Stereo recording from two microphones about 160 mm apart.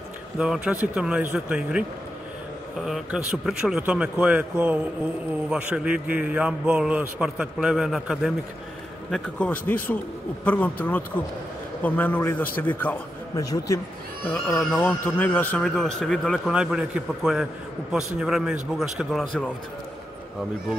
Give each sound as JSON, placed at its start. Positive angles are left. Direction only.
{"t": 0.4, "sound": "a man's voice", "side_deg": -5}
{"t": 13.4, "sound": "speech", "side_deg": 20}
{"t": 14.2, "sound": "a man's voice", "side_deg": 5}
{"t": 16.5, "sound": "a man's voice", "side_deg": -5}